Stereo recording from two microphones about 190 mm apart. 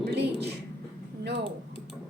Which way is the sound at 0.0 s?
65° right (ahead or behind).